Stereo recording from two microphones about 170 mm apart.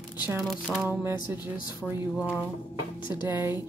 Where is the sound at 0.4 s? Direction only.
Centre (ahead or behind).